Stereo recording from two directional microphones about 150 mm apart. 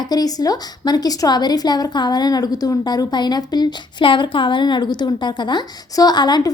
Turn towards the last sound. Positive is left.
turn(degrees=30)  # may be behind; listen again after turning